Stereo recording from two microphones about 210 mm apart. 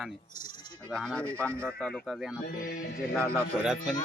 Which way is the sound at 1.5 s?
10° right (ahead or behind).